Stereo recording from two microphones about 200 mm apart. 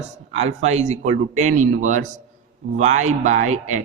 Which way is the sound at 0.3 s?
35° right (ahead or behind).